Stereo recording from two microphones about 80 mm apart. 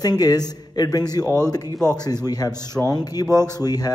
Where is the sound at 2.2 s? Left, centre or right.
Left.